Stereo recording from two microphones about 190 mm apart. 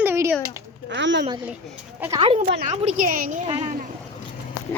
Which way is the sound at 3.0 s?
45° right (ahead or behind).